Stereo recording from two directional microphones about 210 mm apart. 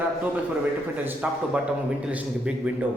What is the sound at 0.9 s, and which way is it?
A man's voice, 5° right (ahead or behind).